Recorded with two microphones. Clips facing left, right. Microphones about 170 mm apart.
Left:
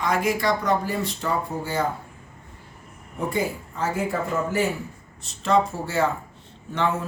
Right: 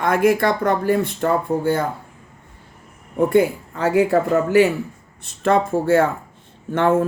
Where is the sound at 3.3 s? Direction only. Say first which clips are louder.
Right 8 dB; 60° right (ahead or behind).